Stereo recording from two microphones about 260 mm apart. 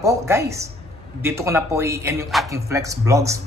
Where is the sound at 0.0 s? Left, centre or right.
Centre.